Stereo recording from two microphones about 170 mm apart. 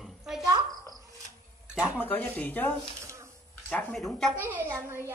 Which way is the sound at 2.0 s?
10° left (ahead or behind).